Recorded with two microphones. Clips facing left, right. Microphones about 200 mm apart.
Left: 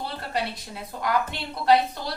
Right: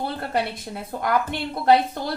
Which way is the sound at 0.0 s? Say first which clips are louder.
Right 4 dB; 50° right (ahead or behind).